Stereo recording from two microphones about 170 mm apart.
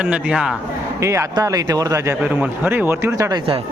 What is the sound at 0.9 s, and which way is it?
Speech, 15° right (ahead or behind).